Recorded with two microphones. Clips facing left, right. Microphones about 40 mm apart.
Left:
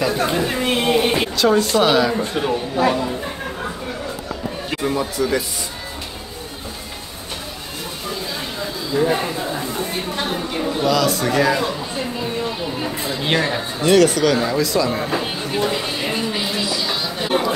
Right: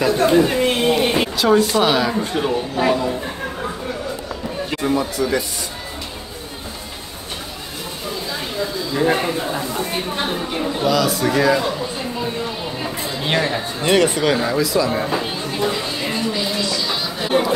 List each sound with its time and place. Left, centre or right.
0.0 s chatter: centre
1.3 s speech: centre
2.8 s a sound: centre
4.6 s speech: centre
9.0 s a man's voice: centre
9.6 s speech: right
10.1 s speech: centre
13.2 s speech: centre
13.8 s a man's voice: right
14.4 s speech: centre
15.5 s chatter: centre